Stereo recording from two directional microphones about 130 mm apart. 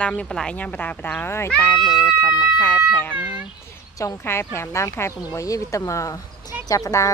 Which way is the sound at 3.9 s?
20° left (ahead or behind).